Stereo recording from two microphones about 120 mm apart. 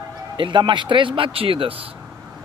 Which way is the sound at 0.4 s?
40° right (ahead or behind).